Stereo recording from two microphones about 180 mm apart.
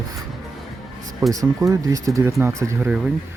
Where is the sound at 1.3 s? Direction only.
20° right (ahead or behind).